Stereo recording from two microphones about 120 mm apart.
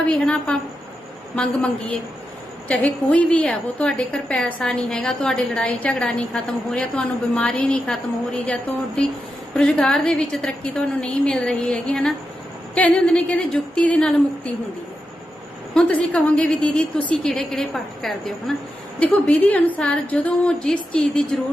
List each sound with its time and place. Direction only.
0.1 s a woman's voice: 10° left (ahead or behind)
9.6 s a woman's voice: 5° left (ahead or behind)
15.7 s a woman's voice: 10° left (ahead or behind)